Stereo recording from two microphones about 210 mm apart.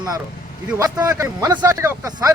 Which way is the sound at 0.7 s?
15° right (ahead or behind).